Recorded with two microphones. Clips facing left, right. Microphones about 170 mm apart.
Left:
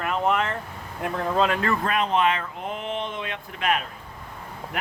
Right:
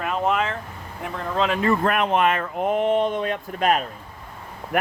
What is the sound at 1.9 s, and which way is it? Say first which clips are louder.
Speech: right 2 dB; 55° right (ahead or behind).